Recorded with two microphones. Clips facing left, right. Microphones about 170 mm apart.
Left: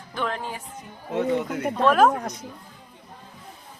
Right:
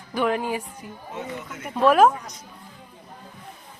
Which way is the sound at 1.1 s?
65° left (ahead or behind).